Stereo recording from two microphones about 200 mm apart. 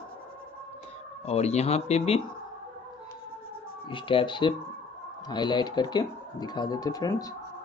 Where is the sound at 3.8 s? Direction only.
25° left (ahead or behind).